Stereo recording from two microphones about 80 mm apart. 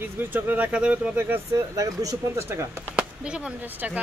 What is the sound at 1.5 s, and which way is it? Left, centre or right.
Speech, right.